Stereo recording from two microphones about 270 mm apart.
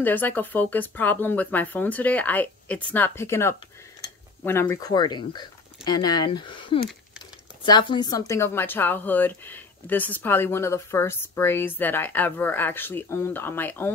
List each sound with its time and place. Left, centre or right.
0.0 s a woman's voice: centre